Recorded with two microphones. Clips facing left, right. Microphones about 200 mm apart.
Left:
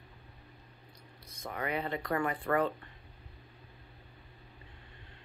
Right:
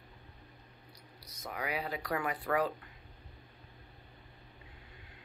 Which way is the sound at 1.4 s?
5° right (ahead or behind).